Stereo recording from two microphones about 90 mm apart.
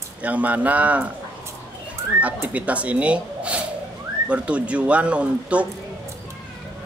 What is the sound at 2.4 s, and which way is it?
A man's voice, 15° right (ahead or behind).